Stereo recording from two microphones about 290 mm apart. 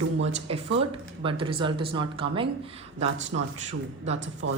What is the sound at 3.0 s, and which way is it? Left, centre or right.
Speech, right.